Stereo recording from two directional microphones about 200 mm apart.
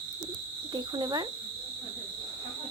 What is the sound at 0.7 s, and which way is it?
Speech, 20° right (ahead or behind).